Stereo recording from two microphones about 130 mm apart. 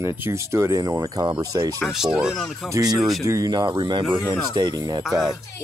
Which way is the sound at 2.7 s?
30° right (ahead or behind).